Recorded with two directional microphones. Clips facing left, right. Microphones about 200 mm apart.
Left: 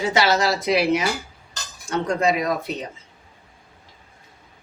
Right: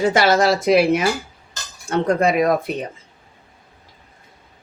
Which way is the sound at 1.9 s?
55° right (ahead or behind).